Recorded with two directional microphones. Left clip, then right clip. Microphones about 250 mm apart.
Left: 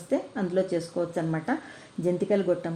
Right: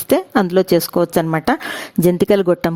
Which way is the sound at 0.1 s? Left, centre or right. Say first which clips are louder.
Right 13 dB; right.